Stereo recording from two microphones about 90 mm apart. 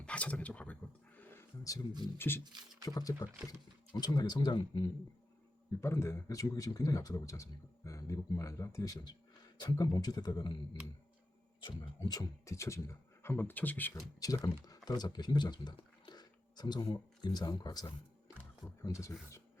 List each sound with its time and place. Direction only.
0.0 s speech: 15° left (ahead or behind)
2.1 s speech: 25° left (ahead or behind)
2.8 s speech: 45° left (ahead or behind)
5.8 s speech: 30° left (ahead or behind); by 10.6 s 55° left (ahead or behind)
11.6 s speech: 55° left (ahead or behind)
12.5 s speech: 35° left (ahead or behind)
14.2 s speech: 40° left (ahead or behind)
18.8 s speech: 35° left (ahead or behind)